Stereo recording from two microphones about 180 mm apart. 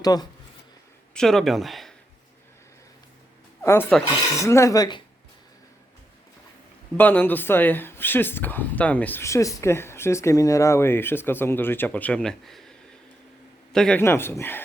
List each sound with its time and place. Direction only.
0.0 s speech: 20° left (ahead or behind)
1.1 s speech: centre (ahead or behind)
3.6 s speech: 15° left (ahead or behind)
6.9 s speech: 10° left (ahead or behind)
13.7 s speech: 5° left (ahead or behind)